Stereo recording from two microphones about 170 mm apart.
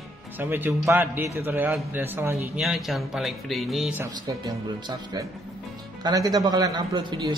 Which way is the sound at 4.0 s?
20° right (ahead or behind).